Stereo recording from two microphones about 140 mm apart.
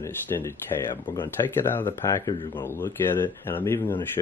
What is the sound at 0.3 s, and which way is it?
Speech, 25° left (ahead or behind).